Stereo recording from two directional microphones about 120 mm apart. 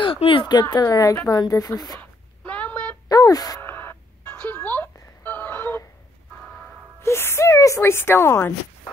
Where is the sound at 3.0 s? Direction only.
30° left (ahead or behind).